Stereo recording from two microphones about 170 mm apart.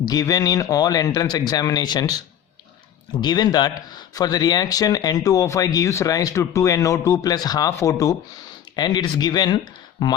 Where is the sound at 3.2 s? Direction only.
25° left (ahead or behind).